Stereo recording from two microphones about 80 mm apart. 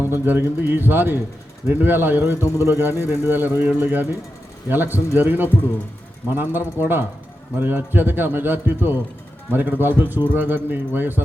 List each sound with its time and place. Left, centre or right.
0.0 s a man's voice: right